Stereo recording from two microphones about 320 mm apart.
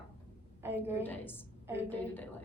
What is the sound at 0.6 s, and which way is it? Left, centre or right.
Speech, centre.